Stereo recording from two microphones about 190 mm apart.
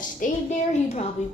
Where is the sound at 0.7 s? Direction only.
35° left (ahead or behind).